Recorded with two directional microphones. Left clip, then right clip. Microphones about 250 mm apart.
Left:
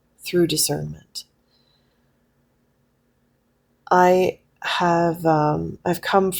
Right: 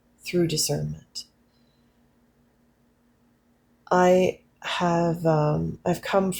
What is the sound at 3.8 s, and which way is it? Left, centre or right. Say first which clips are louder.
Speech: left 3 dB; left.